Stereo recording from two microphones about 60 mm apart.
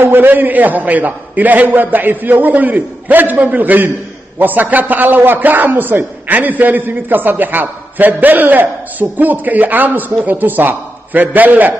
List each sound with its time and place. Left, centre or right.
0.0 s a man's voice: right